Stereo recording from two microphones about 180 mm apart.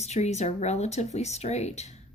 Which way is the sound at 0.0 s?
40° left (ahead or behind).